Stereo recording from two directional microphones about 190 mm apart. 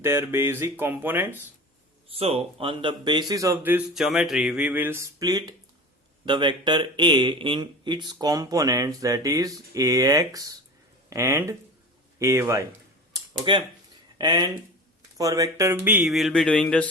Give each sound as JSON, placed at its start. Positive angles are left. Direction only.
{"t": 0.0, "sound": "speech", "side_deg": -10}
{"t": 2.1, "sound": "speech", "side_deg": -30}
{"t": 13.1, "sound": "a sound", "side_deg": -25}
{"t": 14.2, "sound": "speech", "side_deg": -25}